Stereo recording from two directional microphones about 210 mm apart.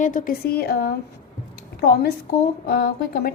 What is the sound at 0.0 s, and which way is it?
A woman's voice, 40° left (ahead or behind).